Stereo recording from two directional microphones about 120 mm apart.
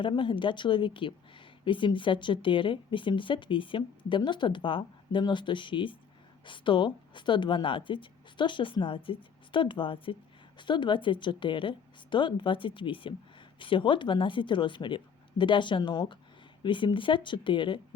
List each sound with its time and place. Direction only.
0.0 s speech: 45° left (ahead or behind)